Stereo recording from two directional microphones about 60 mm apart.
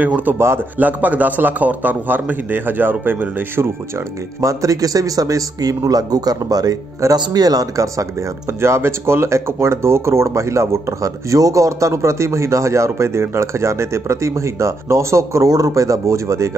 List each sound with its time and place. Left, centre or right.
0.0 s a man's voice: right
4.4 s a man's voice: right
5.9 s speech: right
8.5 s speech: right